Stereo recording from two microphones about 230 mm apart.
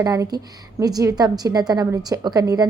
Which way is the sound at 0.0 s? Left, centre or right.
Centre.